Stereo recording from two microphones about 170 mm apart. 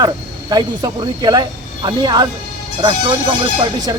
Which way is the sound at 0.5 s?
25° right (ahead or behind).